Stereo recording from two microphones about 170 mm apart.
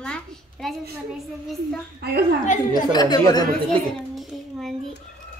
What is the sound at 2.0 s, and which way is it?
Speech, 70° right (ahead or behind).